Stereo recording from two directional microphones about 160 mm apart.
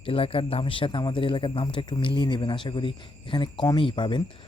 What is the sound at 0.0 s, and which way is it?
Speech, 35° left (ahead or behind).